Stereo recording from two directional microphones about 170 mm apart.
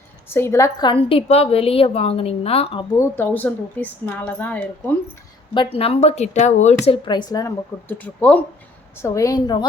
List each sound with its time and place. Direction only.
0.3 s a woman's voice: 15° left (ahead or behind); by 2.8 s 35° left (ahead or behind)
3.0 s a woman's voice: 10° left (ahead or behind)
5.7 s a woman's voice: 35° left (ahead or behind)
6.8 s speech: 30° left (ahead or behind)